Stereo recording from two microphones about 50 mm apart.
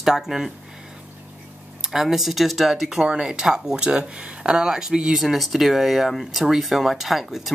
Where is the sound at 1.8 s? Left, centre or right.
Centre.